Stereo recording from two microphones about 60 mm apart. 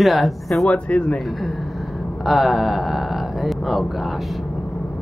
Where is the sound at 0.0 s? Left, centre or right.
Centre.